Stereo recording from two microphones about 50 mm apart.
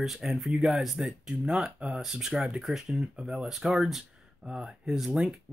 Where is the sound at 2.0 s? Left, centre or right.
Centre.